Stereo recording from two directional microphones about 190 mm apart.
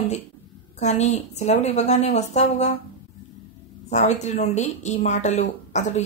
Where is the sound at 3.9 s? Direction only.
35° left (ahead or behind).